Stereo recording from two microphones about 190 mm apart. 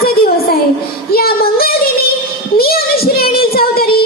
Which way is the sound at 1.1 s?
55° left (ahead or behind).